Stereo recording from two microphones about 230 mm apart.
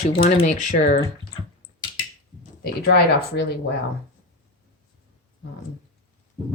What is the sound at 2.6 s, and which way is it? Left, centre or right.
Speech, left.